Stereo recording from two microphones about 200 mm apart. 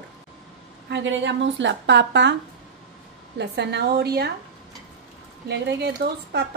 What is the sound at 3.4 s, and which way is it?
Speech, 60° right (ahead or behind).